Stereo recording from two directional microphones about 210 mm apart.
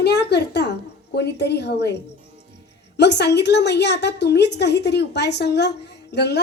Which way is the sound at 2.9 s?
55° left (ahead or behind).